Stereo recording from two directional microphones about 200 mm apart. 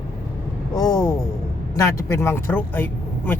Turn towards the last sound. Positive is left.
turn(degrees=10)  # may be behind; listen again after turning